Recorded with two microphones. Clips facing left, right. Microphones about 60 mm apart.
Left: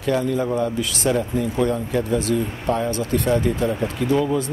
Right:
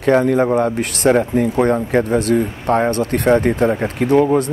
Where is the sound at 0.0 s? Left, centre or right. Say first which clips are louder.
Right 7 dB; right.